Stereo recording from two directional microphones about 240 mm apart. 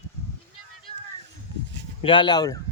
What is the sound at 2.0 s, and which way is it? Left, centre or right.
Speech, left.